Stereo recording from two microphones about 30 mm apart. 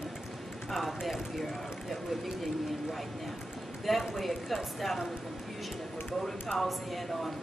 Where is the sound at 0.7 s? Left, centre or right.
Centre.